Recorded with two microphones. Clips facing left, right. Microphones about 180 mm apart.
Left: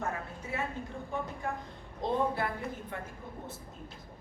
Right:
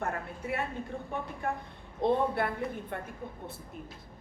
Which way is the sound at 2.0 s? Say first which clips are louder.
Right 3 dB; 60° right (ahead or behind).